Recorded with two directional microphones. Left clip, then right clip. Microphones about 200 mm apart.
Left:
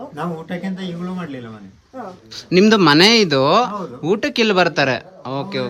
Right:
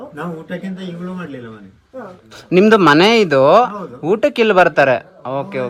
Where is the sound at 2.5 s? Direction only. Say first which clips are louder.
Right 3 dB; 15° left (ahead or behind).